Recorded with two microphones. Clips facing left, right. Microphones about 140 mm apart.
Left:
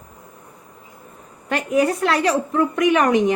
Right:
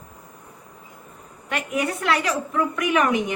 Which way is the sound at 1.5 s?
35° left (ahead or behind).